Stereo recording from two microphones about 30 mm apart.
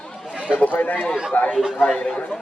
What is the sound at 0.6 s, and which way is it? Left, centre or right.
Speech, left.